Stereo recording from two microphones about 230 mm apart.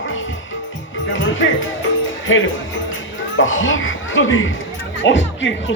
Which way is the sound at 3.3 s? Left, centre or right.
Left.